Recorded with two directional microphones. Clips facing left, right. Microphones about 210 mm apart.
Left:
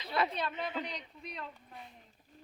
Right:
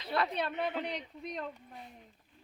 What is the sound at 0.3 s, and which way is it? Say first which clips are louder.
A woman's voice: right 3 dB; 60° right (ahead or behind).